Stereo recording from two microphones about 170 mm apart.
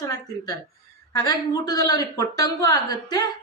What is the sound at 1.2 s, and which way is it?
Speech, 20° left (ahead or behind).